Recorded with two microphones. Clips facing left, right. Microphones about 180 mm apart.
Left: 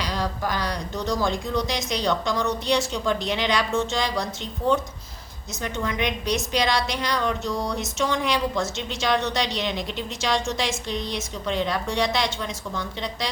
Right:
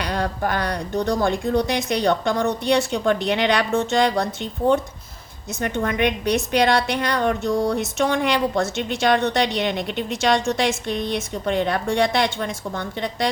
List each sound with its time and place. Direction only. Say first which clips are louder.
0.0 s a woman's voice: right 4 dB; 60° right (ahead or behind)
5.6 s a woman's voice: right 5 dB; 55° right (ahead or behind)